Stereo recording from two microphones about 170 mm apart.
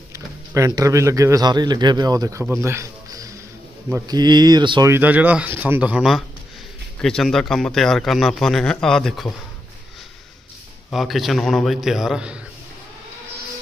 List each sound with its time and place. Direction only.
0.1 s speech: 20° right (ahead or behind)
2.6 s a sound: 15° right (ahead or behind)
3.9 s speech: 20° right (ahead or behind)
4.9 s a man's voice: 10° right (ahead or behind)
10.9 s a man's voice: centre (ahead or behind)